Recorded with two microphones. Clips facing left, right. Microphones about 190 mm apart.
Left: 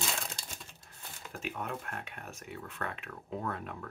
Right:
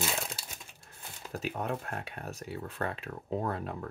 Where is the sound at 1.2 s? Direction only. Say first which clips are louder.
Right 5 dB; 35° right (ahead or behind).